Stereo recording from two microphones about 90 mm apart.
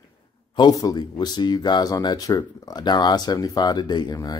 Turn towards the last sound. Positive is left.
turn(degrees=45)  # may be behind; listen again after turning